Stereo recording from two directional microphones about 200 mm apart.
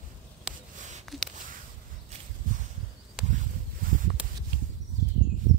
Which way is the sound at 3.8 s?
45° right (ahead or behind).